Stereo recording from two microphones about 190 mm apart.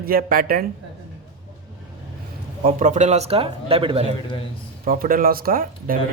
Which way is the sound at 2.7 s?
40° right (ahead or behind).